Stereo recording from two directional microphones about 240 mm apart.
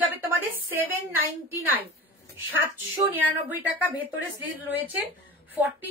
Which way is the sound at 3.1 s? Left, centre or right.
Centre.